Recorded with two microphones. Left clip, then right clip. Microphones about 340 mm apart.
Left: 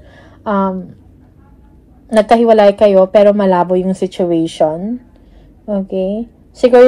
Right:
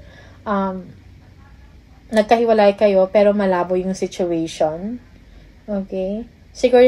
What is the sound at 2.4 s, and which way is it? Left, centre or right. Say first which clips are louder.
A woman's voice: left 6 dB; centre.